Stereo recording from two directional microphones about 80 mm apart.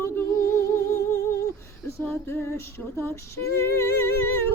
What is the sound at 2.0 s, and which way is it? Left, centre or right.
Female singing, left.